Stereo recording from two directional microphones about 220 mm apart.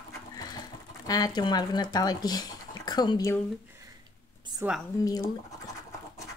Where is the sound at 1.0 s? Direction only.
15° left (ahead or behind).